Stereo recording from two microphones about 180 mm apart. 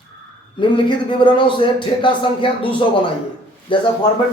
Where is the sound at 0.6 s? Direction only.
25° left (ahead or behind).